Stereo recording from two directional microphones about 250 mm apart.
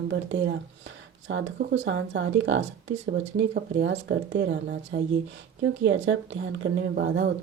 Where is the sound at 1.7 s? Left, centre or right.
Right.